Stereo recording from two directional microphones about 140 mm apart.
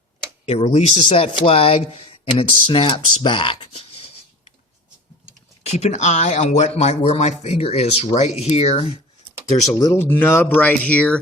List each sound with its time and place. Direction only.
0.4 s speech: 45° left (ahead or behind)
5.6 s speech: 50° left (ahead or behind)
9.7 s speech: 20° left (ahead or behind)